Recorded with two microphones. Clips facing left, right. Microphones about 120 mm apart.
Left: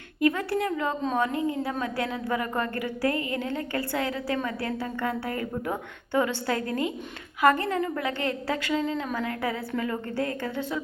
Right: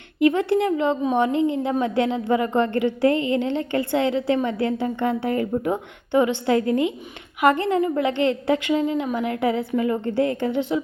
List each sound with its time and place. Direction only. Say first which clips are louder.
0.2 s a woman's voice: right 6 dB; 20° right (ahead or behind)